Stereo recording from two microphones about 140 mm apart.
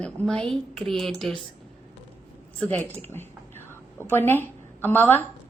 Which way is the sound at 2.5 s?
15° left (ahead or behind).